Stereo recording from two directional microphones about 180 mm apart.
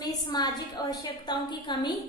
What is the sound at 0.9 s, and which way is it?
A woman's voice, 25° left (ahead or behind).